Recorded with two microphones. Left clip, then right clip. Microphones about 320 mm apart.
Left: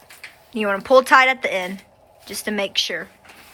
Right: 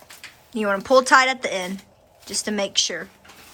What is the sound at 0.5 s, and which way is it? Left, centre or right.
Speech, centre.